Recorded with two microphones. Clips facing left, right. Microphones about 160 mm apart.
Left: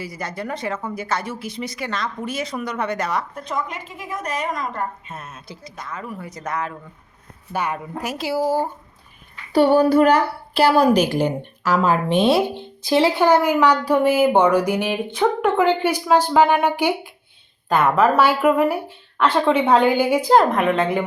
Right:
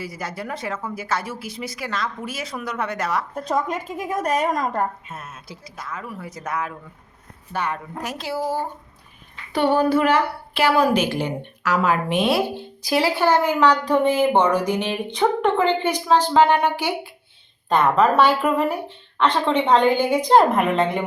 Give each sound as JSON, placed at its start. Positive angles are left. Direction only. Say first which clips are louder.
{"t": 0.0, "sound": "speech", "louder": "left 1 dB", "side_deg": -5}
{"t": 3.3, "sound": "a woman's voice", "louder": "right 4 dB", "side_deg": -40}
{"t": 5.0, "sound": "speech", "louder": "left 1 dB", "side_deg": -5}
{"t": 7.5, "sound": "a woman's voice", "louder": "left 2 dB", "side_deg": 10}
{"t": 9.5, "sound": "a woman's voice", "louder": "left 4 dB", "side_deg": 40}